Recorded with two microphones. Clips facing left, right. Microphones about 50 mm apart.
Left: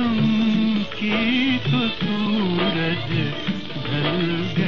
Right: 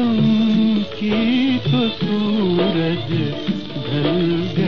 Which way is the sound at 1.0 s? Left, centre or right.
Left.